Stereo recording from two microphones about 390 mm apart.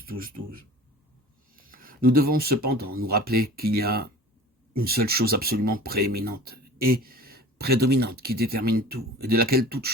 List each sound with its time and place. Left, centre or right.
0.0 s speech: right